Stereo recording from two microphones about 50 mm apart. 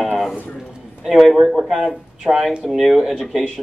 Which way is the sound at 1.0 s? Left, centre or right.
Centre.